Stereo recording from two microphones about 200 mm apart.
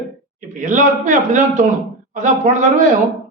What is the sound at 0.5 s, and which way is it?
Speech, 40° right (ahead or behind).